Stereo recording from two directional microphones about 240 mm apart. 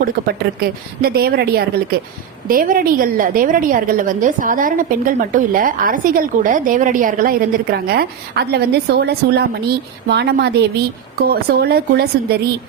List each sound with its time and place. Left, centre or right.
0.6 s a woman's voice: right